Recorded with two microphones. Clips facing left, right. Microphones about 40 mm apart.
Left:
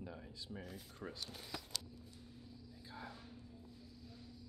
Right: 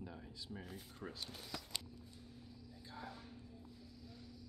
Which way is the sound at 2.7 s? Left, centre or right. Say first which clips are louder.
Right 1 dB; centre.